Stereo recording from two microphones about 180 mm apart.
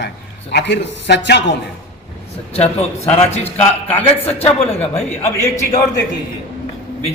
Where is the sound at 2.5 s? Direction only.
35° left (ahead or behind).